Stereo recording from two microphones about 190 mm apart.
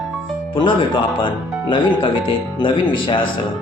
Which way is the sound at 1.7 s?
25° left (ahead or behind).